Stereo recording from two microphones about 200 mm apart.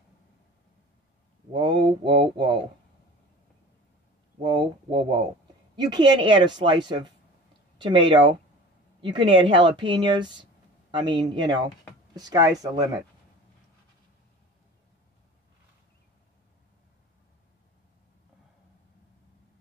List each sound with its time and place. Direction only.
1.5 s speech: 20° right (ahead or behind)
4.4 s speech: 20° right (ahead or behind)